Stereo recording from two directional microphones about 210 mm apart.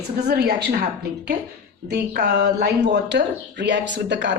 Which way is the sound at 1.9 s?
50° right (ahead or behind).